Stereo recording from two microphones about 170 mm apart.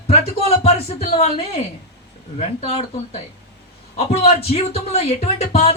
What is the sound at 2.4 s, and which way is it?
Speech, 35° left (ahead or behind).